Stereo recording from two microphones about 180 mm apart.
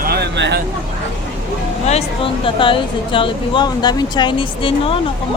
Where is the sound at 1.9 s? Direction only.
35° left (ahead or behind).